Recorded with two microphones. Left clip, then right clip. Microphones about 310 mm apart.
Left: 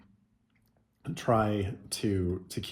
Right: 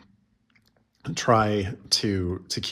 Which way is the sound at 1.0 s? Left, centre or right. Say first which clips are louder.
Right 6 dB; right.